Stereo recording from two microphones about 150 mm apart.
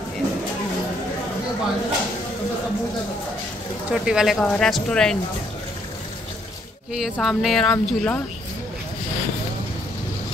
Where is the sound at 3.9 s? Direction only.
5° right (ahead or behind).